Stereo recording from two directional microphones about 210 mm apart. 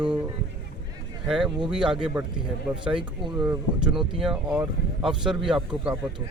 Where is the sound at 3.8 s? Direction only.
5° right (ahead or behind).